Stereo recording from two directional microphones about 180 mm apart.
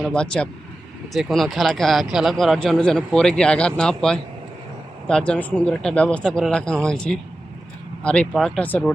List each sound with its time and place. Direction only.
0.0 s speech: 5° left (ahead or behind)